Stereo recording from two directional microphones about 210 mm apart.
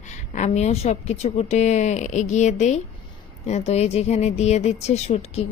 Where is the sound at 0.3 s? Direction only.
35° left (ahead or behind).